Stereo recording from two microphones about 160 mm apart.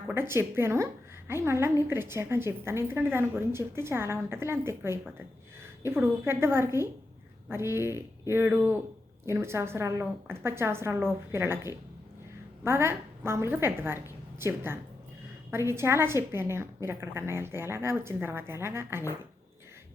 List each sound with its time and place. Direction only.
0.1 s a woman's voice: 15° right (ahead or behind)